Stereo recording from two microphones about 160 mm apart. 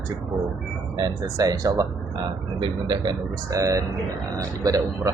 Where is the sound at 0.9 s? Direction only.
25° right (ahead or behind).